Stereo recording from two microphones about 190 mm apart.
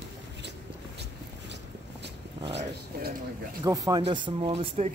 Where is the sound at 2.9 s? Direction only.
55° right (ahead or behind).